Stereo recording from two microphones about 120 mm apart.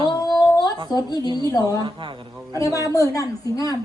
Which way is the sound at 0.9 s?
35° left (ahead or behind).